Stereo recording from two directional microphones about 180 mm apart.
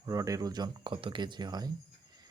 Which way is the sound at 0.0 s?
20° right (ahead or behind).